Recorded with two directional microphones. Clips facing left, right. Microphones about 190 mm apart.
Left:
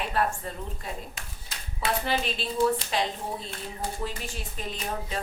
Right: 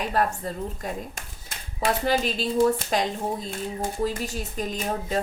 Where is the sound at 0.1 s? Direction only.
40° right (ahead or behind).